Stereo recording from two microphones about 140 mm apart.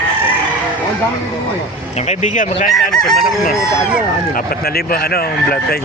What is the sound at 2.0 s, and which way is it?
Speech, 55° left (ahead or behind).